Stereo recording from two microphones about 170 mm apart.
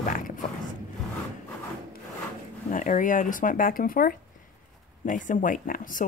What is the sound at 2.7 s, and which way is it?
Speech, 50° left (ahead or behind).